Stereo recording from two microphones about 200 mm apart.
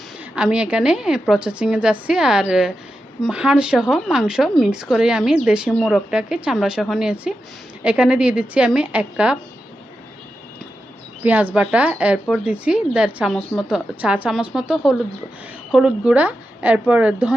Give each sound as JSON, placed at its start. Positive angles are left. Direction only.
{"t": 0.3, "sound": "speech", "side_deg": -5}
{"t": 11.2, "sound": "a woman's voice", "side_deg": -10}